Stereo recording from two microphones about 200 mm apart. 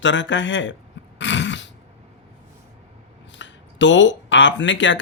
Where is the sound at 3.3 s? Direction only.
65° left (ahead or behind).